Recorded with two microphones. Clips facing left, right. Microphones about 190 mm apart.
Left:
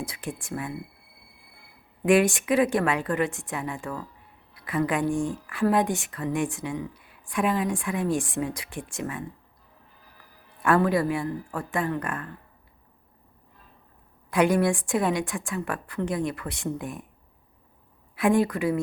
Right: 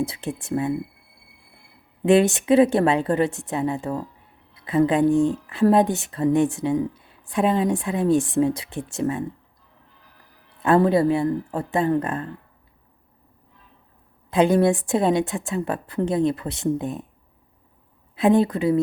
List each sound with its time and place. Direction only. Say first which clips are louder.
0.1 s a woman's voice: right 7 dB; 25° right (ahead or behind)
2.0 s a woman's voice: right 4 dB; 25° right (ahead or behind)
10.8 s a woman's voice: right 8 dB; 25° right (ahead or behind)
14.3 s a woman's voice: right 4 dB; 25° right (ahead or behind)
18.2 s a woman's voice: right 4 dB; 25° right (ahead or behind)